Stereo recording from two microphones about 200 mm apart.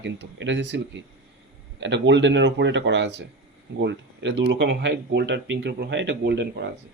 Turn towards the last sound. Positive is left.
turn(degrees=-60)  # may be behind; listen again after turning